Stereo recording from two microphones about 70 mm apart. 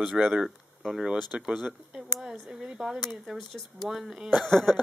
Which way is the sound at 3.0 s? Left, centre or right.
Centre.